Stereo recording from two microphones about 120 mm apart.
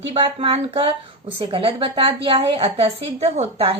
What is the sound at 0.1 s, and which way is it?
A woman's voice, 50° right (ahead or behind).